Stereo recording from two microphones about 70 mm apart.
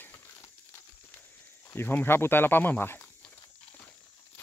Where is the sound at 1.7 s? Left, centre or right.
Left.